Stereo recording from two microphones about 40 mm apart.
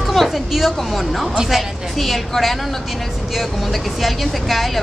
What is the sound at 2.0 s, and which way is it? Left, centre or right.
Speech, centre.